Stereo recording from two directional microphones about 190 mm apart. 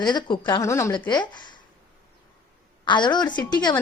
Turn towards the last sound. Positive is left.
turn(degrees=25)  # may be behind; listen again after turning